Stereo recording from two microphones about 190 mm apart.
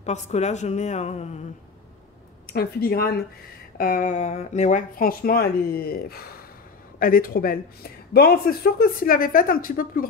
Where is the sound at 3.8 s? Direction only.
45° left (ahead or behind).